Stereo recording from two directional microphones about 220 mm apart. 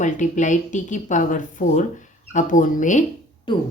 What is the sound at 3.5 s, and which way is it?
Speech, 20° left (ahead or behind).